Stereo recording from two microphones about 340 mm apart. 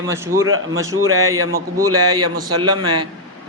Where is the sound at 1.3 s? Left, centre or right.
Right.